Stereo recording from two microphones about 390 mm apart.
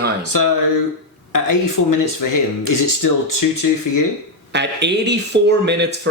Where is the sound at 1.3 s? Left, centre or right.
Left.